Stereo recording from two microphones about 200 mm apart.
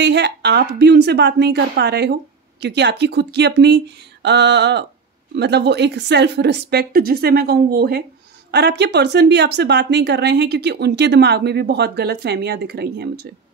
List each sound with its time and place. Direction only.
0.0 s speech: 60° right (ahead or behind)